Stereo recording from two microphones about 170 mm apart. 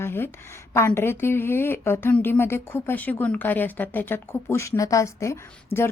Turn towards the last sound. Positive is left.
turn(degrees=15)  # may be behind; listen again after turning